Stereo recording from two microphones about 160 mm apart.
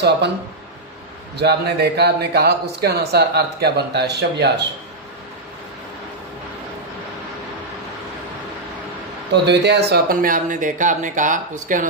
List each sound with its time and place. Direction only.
1.4 s speech: 90° right
9.3 s speech: 90° right; by 11.9 s 55° right (ahead or behind)